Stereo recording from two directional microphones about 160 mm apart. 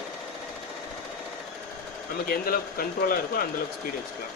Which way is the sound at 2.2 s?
65° left (ahead or behind).